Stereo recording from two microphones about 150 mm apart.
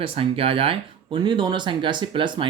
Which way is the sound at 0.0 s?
40° right (ahead or behind).